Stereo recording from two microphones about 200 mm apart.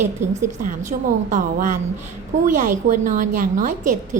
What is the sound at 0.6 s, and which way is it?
A woman's voice, 40° right (ahead or behind).